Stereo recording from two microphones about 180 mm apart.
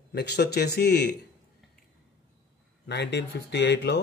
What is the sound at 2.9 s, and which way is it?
Speech, 70° left (ahead or behind).